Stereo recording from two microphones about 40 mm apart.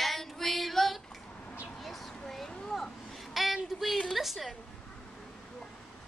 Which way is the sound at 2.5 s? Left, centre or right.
Centre.